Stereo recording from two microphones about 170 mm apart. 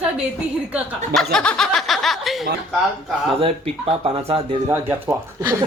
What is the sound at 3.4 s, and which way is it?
Speech, 35° right (ahead or behind).